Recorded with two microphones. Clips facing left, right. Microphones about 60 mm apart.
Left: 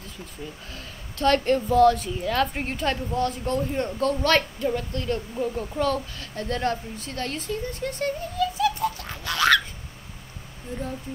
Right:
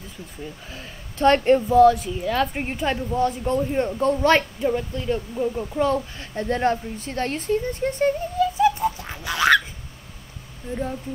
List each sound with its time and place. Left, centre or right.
0.7 s speech: right
1.8 s a woman's voice: centre
5.8 s a woman's voice: centre
8.7 s a sound: centre